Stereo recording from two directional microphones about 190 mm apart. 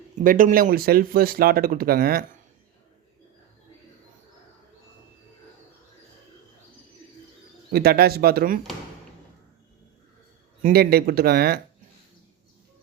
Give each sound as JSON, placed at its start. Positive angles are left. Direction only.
{"t": 0.2, "sound": "speech", "side_deg": -40}
{"t": 7.7, "sound": "speech", "side_deg": -55}
{"t": 10.6, "sound": "speech", "side_deg": -55}